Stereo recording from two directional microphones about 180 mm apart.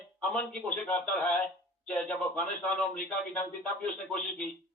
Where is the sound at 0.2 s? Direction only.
5° left (ahead or behind).